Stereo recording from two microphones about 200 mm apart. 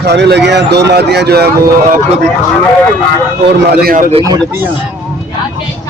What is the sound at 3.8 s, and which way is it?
Speech, 40° right (ahead or behind).